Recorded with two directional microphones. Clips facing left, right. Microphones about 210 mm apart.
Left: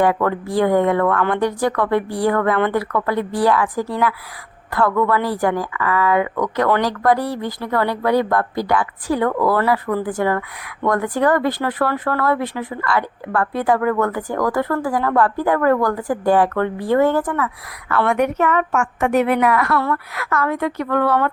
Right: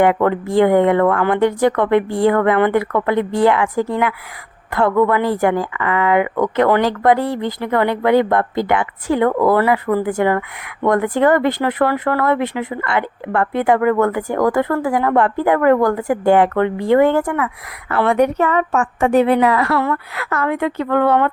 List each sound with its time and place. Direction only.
0.0 s speech: 20° right (ahead or behind)